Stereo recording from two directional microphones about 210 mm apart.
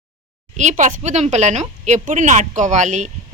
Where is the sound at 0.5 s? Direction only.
35° right (ahead or behind).